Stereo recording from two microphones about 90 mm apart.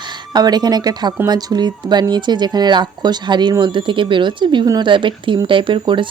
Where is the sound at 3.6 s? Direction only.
65° right (ahead or behind).